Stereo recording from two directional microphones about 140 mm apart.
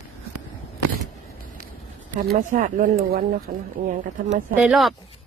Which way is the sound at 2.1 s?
70° right (ahead or behind).